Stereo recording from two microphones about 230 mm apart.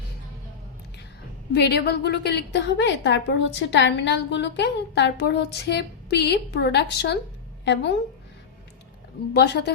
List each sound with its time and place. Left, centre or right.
1.5 s a woman's voice: left
9.3 s a woman's voice: left